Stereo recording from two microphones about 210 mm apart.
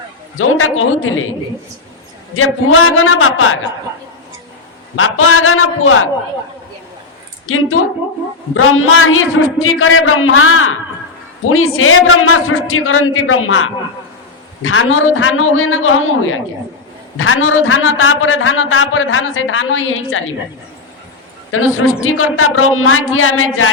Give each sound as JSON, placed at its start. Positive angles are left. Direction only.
{"t": 0.3, "sound": "a man's voice", "side_deg": 75}
{"t": 2.3, "sound": "a man's voice", "side_deg": 75}
{"t": 4.9, "sound": "a man's voice", "side_deg": 80}
{"t": 7.4, "sound": "a woman's voice", "side_deg": 75}
{"t": 21.5, "sound": "a man's voice", "side_deg": 75}